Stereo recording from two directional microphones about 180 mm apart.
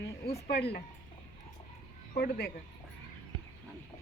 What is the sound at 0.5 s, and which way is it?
Speech, 65° left (ahead or behind).